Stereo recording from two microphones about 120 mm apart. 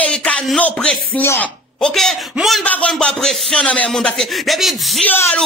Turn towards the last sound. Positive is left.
turn(degrees=15)  # may be behind; listen again after turning